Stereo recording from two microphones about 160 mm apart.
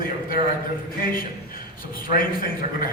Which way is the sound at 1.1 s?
65° left (ahead or behind).